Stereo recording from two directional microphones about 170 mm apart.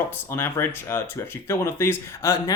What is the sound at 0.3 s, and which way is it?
Speech, 15° left (ahead or behind).